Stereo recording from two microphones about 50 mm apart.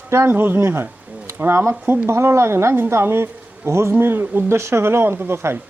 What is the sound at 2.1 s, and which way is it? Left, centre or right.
Speech, right.